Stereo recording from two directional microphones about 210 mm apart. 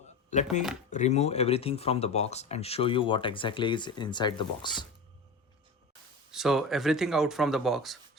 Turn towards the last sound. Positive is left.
turn(degrees=0)  # may be behind; listen again after turning